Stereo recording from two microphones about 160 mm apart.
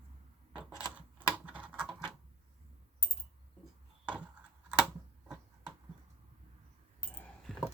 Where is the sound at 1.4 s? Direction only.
10° right (ahead or behind).